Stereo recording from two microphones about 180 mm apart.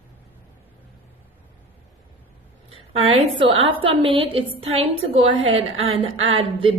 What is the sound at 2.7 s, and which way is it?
A woman's voice, 35° right (ahead or behind).